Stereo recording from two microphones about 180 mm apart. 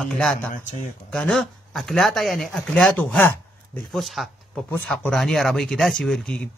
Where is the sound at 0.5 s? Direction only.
45° left (ahead or behind).